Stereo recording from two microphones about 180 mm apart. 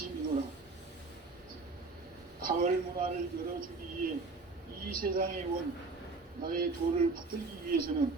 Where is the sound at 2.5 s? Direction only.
55° right (ahead or behind).